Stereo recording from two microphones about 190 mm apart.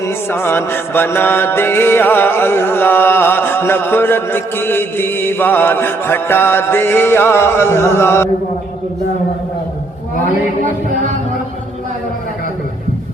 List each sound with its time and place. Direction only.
0.0 s music: 10° left (ahead or behind)